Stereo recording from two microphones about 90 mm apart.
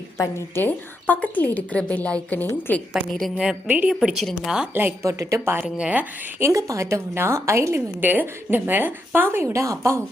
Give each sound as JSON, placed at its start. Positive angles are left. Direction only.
{"t": 0.2, "sound": "a woman's voice", "side_deg": 30}
{"t": 3.2, "sound": "a woman's voice", "side_deg": 0}
{"t": 3.7, "sound": "speech", "side_deg": -15}
{"t": 4.0, "sound": "a woman's voice", "side_deg": -5}
{"t": 4.7, "sound": "a woman's voice", "side_deg": -20}
{"t": 5.0, "sound": "a woman's voice", "side_deg": -35}
{"t": 5.6, "sound": "speech", "side_deg": -10}
{"t": 6.4, "sound": "a woman's voice", "side_deg": -35}